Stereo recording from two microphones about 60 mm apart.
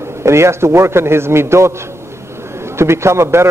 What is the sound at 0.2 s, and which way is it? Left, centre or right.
A man's voice, right.